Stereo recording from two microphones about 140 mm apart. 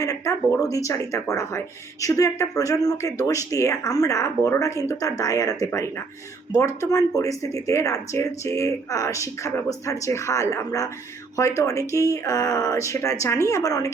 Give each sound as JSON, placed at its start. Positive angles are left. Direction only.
{"t": 0.0, "sound": "speech", "side_deg": 25}